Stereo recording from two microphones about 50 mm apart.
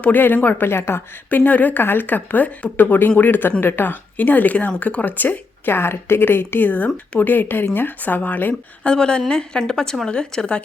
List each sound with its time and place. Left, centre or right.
0.0 s a woman's voice: left
0.7 s a woman's voice: left
1.3 s a woman's voice: left
1.8 s a woman's voice: left
6.7 s a woman's voice: left
8.8 s a woman's voice: centre